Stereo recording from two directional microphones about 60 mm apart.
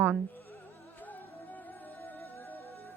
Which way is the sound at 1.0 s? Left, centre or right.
Left.